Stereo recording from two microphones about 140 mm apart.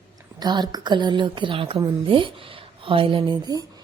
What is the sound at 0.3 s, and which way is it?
A woman's voice, 30° right (ahead or behind).